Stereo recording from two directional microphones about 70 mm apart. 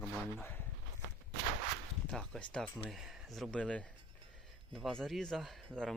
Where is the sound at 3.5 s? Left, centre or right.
Centre.